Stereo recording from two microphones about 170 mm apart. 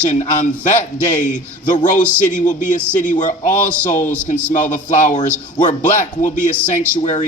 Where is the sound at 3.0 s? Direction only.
50° left (ahead or behind).